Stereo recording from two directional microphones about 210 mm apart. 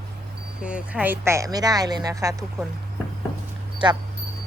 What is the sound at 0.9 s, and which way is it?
Speech, 10° right (ahead or behind).